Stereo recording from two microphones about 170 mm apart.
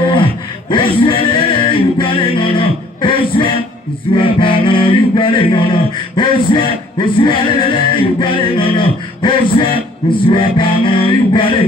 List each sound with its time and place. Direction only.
0.1 s vocal music: 30° left (ahead or behind)
4.2 s music: 30° left (ahead or behind)